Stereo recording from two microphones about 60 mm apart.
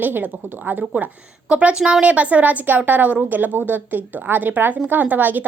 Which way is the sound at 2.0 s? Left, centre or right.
Right.